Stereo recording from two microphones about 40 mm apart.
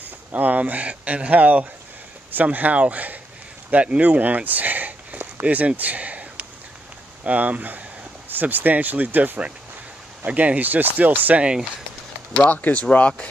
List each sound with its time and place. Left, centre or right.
0.0 s speech: right
5.8 s a sound: right
7.2 s speech: right
12.4 s speech: left